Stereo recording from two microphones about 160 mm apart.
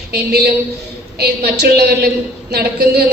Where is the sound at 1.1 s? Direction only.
85° right.